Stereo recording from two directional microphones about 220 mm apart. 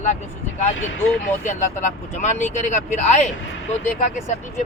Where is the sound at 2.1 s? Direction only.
35° left (ahead or behind).